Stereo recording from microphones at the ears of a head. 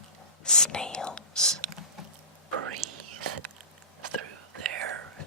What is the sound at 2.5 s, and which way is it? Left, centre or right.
Whispering, right.